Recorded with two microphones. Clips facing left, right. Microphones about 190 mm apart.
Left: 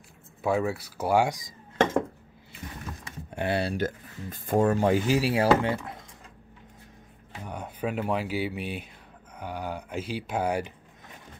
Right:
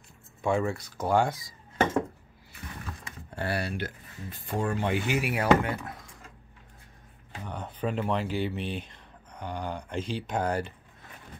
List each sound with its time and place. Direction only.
0.4 s speech: 5° left (ahead or behind)
3.3 s speech: 20° left (ahead or behind)
3.7 s speech: 45° left (ahead or behind); by 5.9 s 25° left (ahead or behind)
7.4 s speech: 10° left (ahead or behind)